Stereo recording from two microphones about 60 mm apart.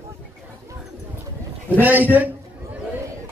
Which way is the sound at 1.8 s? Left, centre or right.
Right.